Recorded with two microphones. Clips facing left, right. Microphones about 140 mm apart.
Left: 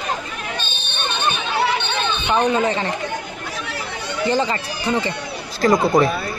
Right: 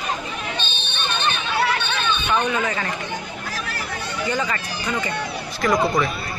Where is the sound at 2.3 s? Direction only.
30° left (ahead or behind).